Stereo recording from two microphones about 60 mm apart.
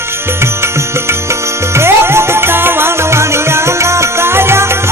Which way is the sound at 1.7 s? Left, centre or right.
Right.